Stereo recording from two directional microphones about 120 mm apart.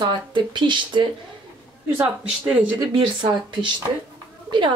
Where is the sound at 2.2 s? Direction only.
10° right (ahead or behind).